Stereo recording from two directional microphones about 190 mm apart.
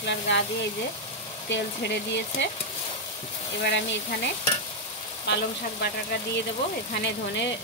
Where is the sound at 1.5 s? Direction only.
65° left (ahead or behind).